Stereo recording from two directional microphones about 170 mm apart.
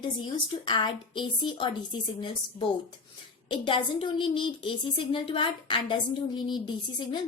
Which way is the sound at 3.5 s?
30° left (ahead or behind).